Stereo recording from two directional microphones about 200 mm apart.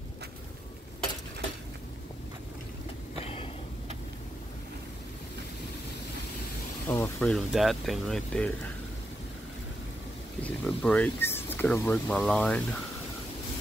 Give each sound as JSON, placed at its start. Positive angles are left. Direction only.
{"t": 3.2, "sound": "a sound", "side_deg": 30}
{"t": 6.9, "sound": "speech", "side_deg": 10}
{"t": 10.4, "sound": "speech", "side_deg": 5}